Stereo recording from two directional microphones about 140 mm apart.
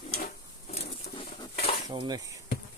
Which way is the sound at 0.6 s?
50° left (ahead or behind).